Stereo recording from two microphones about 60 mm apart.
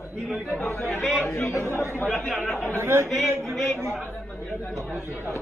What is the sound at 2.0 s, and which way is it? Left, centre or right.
Speech, centre.